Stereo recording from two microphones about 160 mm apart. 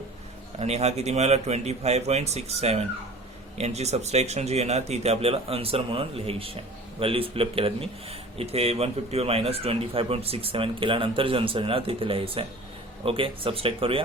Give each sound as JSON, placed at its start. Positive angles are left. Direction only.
{"t": 0.6, "sound": "speech", "side_deg": -40}